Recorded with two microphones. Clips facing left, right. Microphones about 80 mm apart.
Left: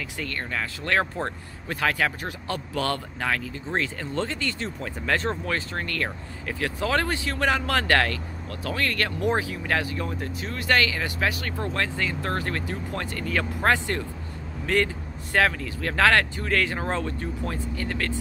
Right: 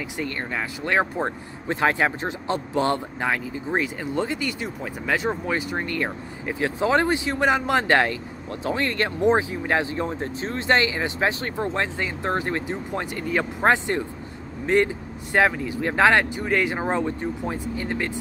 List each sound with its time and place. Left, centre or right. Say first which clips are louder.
0.2 s speech: right 2 dB; centre